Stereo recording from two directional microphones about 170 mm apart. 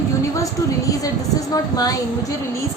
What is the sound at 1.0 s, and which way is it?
Speech, 20° left (ahead or behind).